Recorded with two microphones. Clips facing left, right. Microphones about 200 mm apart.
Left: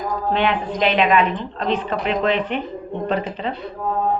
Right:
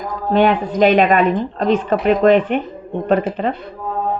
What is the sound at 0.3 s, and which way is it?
A woman's voice, 45° right (ahead or behind).